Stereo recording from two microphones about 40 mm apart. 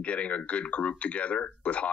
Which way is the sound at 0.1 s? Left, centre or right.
Left.